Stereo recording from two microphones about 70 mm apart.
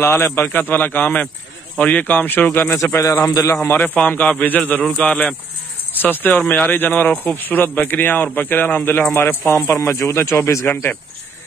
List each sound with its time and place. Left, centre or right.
0.0 s speech: left
3.0 s a man's voice: left
3.6 s a man's voice: left
9.5 s a man's voice: left